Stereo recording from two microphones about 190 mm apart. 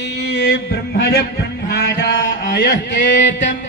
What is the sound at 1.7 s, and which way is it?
Mantra, 60° left (ahead or behind).